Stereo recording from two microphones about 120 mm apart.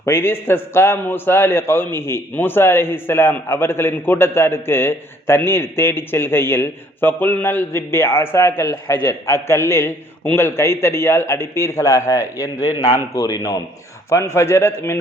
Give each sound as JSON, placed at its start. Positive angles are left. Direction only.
{"t": 0.0, "sound": "a man's voice", "side_deg": 20}